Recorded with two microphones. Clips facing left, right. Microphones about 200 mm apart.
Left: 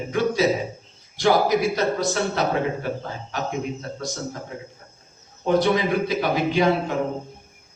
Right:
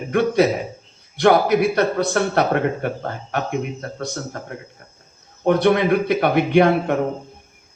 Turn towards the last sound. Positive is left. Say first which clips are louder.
# right 5 dB
turn(degrees=-60)  # may be behind; listen again after turning